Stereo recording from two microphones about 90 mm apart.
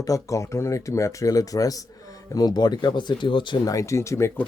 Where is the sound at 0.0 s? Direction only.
40° left (ahead or behind); by 3.6 s 60° left (ahead or behind).